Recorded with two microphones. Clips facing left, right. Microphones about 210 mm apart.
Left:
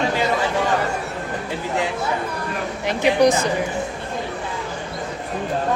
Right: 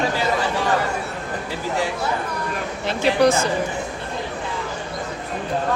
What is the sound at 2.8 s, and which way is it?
Speech, 15° left (ahead or behind).